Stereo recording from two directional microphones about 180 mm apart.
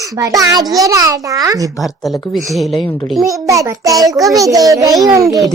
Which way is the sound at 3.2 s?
20° right (ahead or behind).